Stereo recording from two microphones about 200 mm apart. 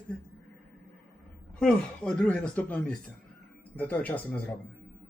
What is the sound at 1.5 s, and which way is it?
Speech, 5° left (ahead or behind).